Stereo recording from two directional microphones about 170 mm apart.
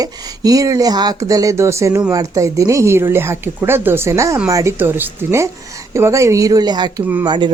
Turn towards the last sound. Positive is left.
turn(degrees=-25)  # may be behind; listen again after turning